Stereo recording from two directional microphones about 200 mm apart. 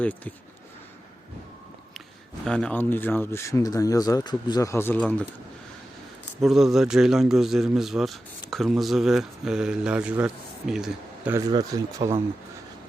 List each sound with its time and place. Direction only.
0.0 s speech: 10° left (ahead or behind)
2.4 s speech: 5° left (ahead or behind)
6.4 s a man's voice: centre (ahead or behind)
11.3 s speech: 20° right (ahead or behind)